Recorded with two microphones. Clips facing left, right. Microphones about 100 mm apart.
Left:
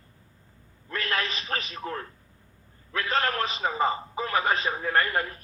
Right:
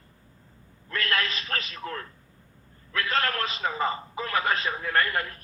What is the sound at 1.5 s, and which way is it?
A man's voice, 25° left (ahead or behind).